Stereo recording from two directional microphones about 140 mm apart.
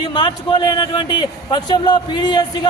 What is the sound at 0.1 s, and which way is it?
A man's voice, 35° left (ahead or behind).